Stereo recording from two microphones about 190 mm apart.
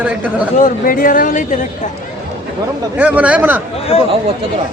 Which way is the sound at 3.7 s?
30° left (ahead or behind).